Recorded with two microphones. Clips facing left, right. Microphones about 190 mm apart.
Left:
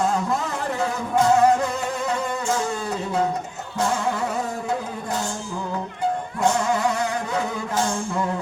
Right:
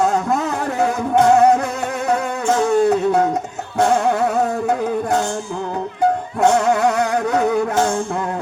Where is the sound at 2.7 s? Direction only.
60° right (ahead or behind).